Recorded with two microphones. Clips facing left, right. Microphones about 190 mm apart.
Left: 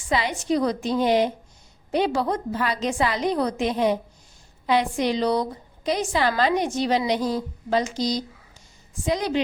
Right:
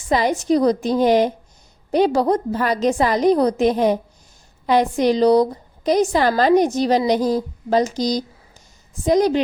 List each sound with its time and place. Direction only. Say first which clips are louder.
0.1 s a woman's voice: right 6 dB; 40° right (ahead or behind)